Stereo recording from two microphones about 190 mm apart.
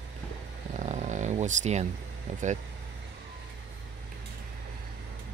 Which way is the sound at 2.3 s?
40° right (ahead or behind).